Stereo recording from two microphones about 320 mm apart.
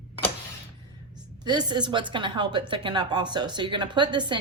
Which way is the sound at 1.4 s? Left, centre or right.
Centre.